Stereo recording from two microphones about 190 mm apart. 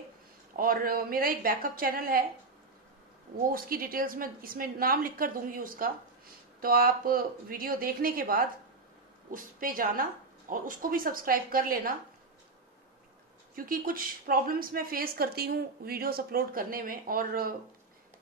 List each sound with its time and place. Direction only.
0.6 s a woman's voice: 50° right (ahead or behind)
3.4 s a woman's voice: 50° right (ahead or behind)
13.6 s a woman's voice: 50° right (ahead or behind)